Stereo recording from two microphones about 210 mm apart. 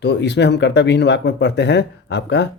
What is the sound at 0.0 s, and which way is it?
Speech, 55° left (ahead or behind).